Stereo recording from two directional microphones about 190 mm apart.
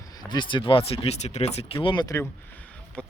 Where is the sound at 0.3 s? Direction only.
25° left (ahead or behind).